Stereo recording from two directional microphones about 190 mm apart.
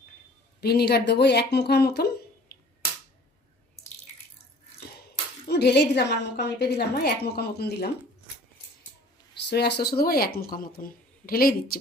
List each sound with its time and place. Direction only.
0.6 s speech: 55° left (ahead or behind)
5.5 s a woman's voice: 60° left (ahead or behind)
9.5 s a woman's voice: 60° left (ahead or behind)